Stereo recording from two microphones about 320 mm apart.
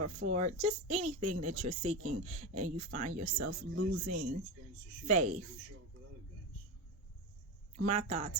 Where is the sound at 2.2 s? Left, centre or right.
Right.